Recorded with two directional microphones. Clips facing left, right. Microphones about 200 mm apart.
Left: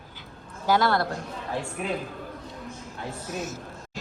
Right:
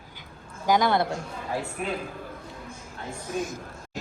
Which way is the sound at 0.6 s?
15° right (ahead or behind).